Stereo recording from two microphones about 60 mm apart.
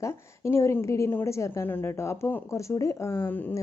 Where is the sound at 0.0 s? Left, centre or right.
Left.